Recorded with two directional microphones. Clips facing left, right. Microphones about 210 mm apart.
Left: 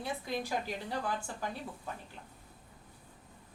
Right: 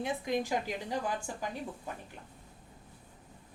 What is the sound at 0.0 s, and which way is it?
A woman's voice, 15° right (ahead or behind).